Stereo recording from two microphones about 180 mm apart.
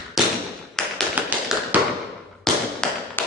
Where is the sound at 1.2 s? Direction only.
10° right (ahead or behind).